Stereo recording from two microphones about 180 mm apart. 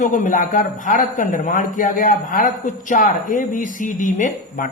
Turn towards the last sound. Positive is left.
turn(degrees=45)  # may be behind; listen again after turning